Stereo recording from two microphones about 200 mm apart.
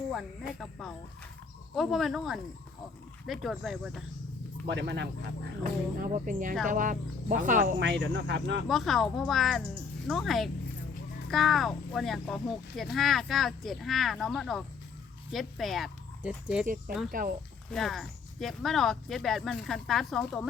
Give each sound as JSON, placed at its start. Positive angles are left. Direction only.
{"t": 0.6, "sound": "speech", "side_deg": 0}
{"t": 4.7, "sound": "speech", "side_deg": -55}
{"t": 5.6, "sound": "speech", "side_deg": -40}
{"t": 7.8, "sound": "speech", "side_deg": -60}
{"t": 8.6, "sound": "speech", "side_deg": 0}
{"t": 17.1, "sound": "speech", "side_deg": -45}
{"t": 17.7, "sound": "speech", "side_deg": 0}